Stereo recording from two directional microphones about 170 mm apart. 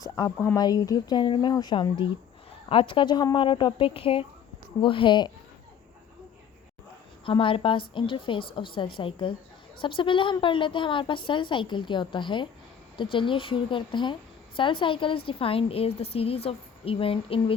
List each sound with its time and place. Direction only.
0.0 s a woman's voice: 20° left (ahead or behind)
7.3 s a woman's voice: 30° left (ahead or behind)